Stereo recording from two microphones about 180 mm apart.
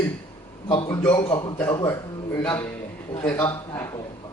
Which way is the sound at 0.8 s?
20° left (ahead or behind).